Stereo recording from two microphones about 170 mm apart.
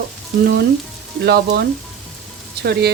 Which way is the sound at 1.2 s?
80° right.